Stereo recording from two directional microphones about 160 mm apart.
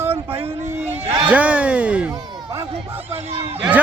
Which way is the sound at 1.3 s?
10° right (ahead or behind).